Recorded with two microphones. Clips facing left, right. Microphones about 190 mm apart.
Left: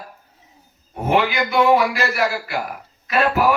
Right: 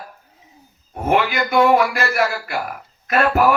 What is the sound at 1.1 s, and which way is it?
A man's voice, 50° right (ahead or behind).